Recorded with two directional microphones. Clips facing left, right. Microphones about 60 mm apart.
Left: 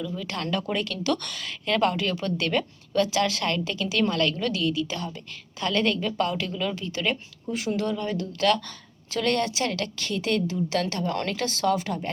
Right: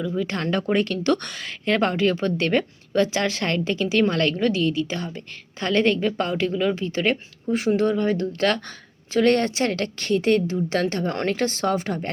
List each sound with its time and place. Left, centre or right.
0.2 s speech: right